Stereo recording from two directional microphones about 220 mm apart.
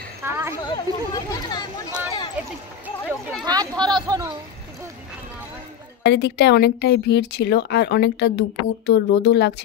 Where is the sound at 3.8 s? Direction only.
20° right (ahead or behind).